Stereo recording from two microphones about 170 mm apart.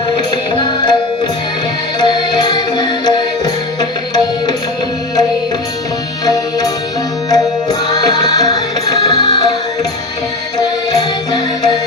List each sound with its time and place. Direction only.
0.2 s music: 25° left (ahead or behind)
2.0 s music: 25° left (ahead or behind)
6.2 s music: 20° left (ahead or behind)
10.6 s music: 25° left (ahead or behind)